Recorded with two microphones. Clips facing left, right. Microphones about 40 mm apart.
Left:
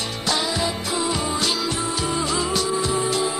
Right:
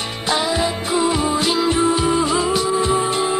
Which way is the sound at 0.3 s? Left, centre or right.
Right.